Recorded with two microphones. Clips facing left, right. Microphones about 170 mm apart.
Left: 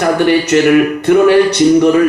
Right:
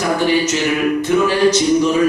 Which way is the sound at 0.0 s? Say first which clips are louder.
Left 5 dB; 60° left (ahead or behind).